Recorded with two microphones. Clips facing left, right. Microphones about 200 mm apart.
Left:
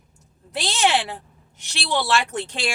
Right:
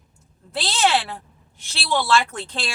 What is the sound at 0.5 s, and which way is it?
A woman's voice, 15° left (ahead or behind).